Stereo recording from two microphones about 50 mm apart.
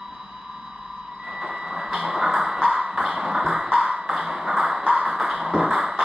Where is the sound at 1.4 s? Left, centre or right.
Centre.